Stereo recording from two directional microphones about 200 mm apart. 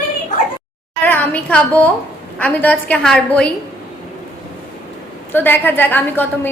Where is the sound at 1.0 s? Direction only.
10° left (ahead or behind).